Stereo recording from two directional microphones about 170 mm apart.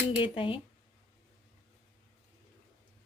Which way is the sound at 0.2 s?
30° left (ahead or behind).